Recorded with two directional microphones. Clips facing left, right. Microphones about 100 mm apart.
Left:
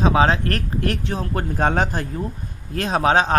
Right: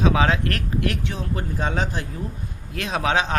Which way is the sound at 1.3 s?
55° left (ahead or behind).